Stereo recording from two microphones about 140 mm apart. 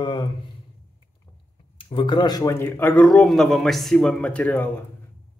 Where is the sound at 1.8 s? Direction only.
35° left (ahead or behind).